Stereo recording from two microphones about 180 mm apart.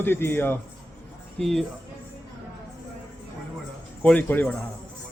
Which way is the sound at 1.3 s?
Centre (ahead or behind).